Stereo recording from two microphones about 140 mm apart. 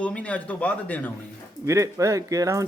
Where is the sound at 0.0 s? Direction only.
10° left (ahead or behind).